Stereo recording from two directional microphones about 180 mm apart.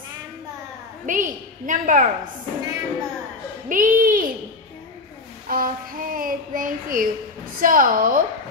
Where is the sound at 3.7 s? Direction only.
50° right (ahead or behind).